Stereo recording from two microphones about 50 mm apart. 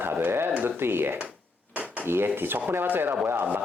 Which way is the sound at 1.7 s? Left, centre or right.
Right.